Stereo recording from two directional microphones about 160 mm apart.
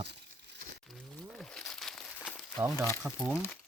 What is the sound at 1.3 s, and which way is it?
Crumpling, 5° left (ahead or behind).